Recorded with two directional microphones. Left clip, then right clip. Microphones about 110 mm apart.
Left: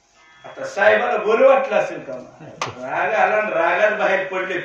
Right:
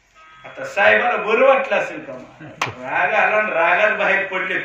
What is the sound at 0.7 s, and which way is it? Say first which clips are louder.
A man's voice: right 1 dB; 20° left (ahead or behind).